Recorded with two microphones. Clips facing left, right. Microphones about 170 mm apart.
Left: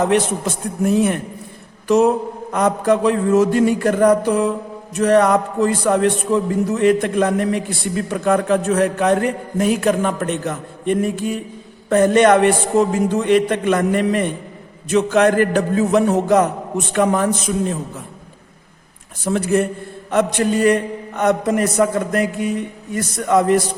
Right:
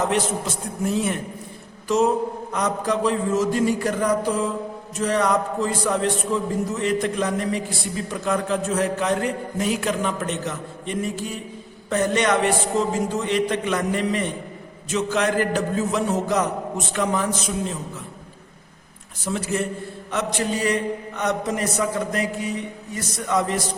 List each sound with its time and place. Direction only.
0.9 s a man's voice: 60° left (ahead or behind)
2.5 s a man's voice: 55° left (ahead or behind)
19.2 s a man's voice: 55° left (ahead or behind)